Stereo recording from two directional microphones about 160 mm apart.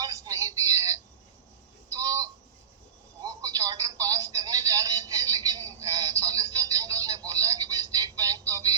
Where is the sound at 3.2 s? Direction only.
25° right (ahead or behind).